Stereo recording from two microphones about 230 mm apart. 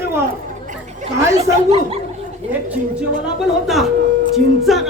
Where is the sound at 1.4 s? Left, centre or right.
Right.